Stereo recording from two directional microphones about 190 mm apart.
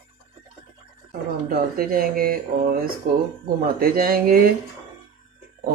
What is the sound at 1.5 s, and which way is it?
Speech, 50° right (ahead or behind).